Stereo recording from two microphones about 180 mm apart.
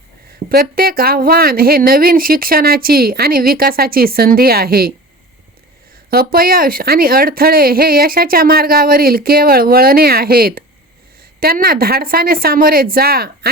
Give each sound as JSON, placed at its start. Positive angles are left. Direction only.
{"t": 0.5, "sound": "speech", "side_deg": -55}
{"t": 6.1, "sound": "speech", "side_deg": -55}